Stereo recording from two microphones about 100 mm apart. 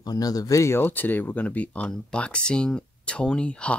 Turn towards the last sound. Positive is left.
turn(degrees=10)  # may be behind; listen again after turning